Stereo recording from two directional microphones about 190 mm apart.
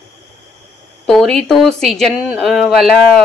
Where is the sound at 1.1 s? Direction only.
5° left (ahead or behind).